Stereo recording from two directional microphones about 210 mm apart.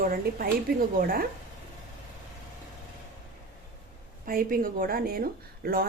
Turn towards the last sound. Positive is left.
turn(degrees=-45)  # may be behind; listen again after turning